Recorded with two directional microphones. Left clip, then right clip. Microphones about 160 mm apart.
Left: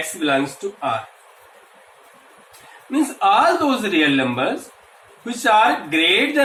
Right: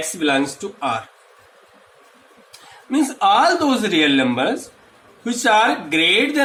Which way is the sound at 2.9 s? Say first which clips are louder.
Right 1 dB; 40° right (ahead or behind).